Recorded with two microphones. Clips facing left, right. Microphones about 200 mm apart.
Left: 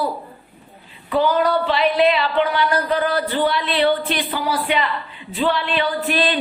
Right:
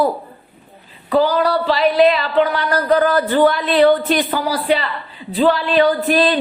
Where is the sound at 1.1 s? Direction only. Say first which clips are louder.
Right 2 dB; 35° right (ahead or behind).